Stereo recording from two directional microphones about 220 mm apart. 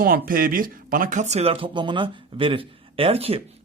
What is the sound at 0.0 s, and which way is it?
Speech, 40° right (ahead or behind).